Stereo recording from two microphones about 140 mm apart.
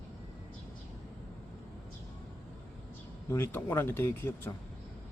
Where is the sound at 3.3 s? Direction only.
15° left (ahead or behind).